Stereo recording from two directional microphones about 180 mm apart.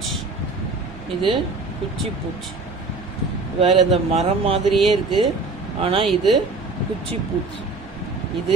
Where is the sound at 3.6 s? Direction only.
30° right (ahead or behind).